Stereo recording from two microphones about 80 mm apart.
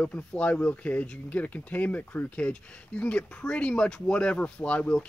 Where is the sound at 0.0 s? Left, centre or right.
Centre.